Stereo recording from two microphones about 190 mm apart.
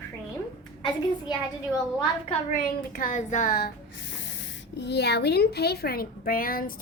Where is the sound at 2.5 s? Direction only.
45° left (ahead or behind).